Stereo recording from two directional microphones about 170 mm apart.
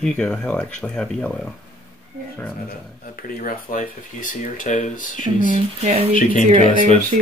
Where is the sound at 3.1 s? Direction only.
55° left (ahead or behind).